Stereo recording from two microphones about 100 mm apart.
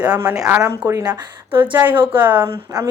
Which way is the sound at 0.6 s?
30° right (ahead or behind).